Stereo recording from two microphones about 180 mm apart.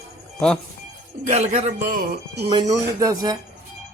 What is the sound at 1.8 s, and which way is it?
Speech, 55° right (ahead or behind).